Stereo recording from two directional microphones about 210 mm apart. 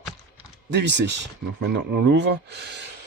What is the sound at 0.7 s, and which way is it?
Speech, 55° right (ahead or behind).